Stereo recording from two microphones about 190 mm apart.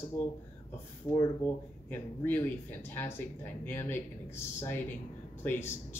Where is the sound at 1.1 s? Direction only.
35° left (ahead or behind).